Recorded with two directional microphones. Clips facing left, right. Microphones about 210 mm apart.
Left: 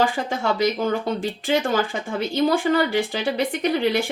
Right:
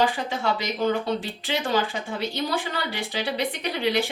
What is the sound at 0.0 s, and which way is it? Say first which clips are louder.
Speech: left 2 dB; 45° left (ahead or behind).